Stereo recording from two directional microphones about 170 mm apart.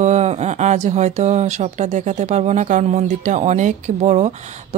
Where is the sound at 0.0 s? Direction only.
40° right (ahead or behind).